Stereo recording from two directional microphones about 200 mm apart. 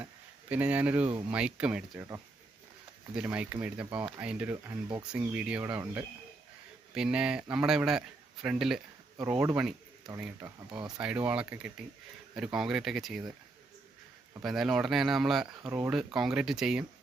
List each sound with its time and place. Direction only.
0.0 s a sound: 5° right (ahead or behind)
1.3 s a man's voice: 5° right (ahead or behind)
3.2 s a man's voice: 5° right (ahead or behind)
10.4 s speech: 25° right (ahead or behind)
11.0 s a man's voice: 10° right (ahead or behind)
14.4 s a man's voice: centre (ahead or behind)